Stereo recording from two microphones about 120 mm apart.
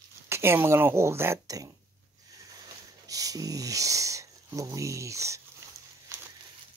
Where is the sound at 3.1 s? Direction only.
30° right (ahead or behind).